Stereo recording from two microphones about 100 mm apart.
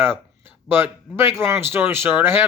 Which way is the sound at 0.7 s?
25° right (ahead or behind).